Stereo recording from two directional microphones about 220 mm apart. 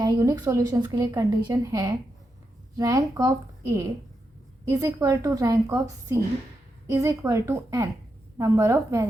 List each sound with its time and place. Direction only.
0.0 s a woman's voice: 15° right (ahead or behind)
4.7 s a woman's voice: 10° right (ahead or behind)